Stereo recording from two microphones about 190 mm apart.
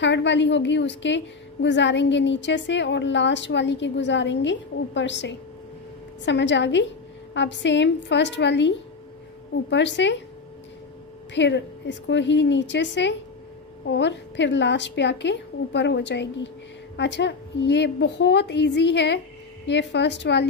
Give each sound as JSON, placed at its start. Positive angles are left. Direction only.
{"t": 0.0, "sound": "a woman's voice", "side_deg": 70}
{"t": 11.3, "sound": "a woman's voice", "side_deg": 70}